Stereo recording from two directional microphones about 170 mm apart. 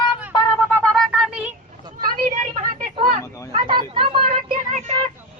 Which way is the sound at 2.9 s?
30° right (ahead or behind).